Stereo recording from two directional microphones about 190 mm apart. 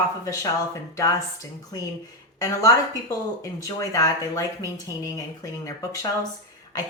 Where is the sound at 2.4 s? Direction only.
20° left (ahead or behind).